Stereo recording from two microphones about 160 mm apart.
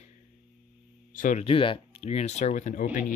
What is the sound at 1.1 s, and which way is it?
Speech, 55° left (ahead or behind).